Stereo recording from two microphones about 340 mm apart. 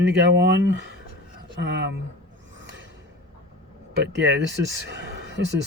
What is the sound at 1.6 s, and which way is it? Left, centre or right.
Speech, right.